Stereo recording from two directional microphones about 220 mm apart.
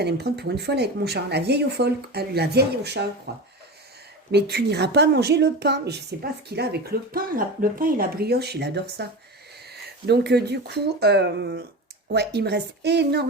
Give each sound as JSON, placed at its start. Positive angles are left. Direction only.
{"t": 0.0, "sound": "a woman's voice", "side_deg": -45}